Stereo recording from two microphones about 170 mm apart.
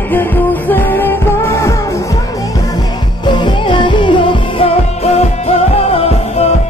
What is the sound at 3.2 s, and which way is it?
Music, 25° left (ahead or behind).